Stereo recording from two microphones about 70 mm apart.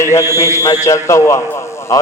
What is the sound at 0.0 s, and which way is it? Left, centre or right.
A man's voice, left.